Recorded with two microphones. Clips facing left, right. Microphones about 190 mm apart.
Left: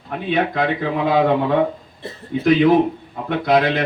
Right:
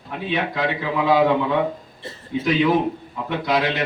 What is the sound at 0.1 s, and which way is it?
Speech, 50° left (ahead or behind).